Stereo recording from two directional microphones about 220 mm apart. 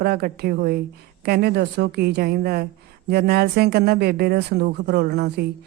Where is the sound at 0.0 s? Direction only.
45° right (ahead or behind).